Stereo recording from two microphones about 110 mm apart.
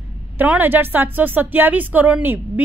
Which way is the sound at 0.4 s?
15° right (ahead or behind).